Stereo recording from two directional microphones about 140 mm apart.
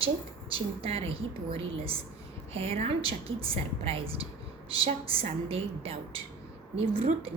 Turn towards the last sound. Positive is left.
turn(degrees=-40)  # may be behind; listen again after turning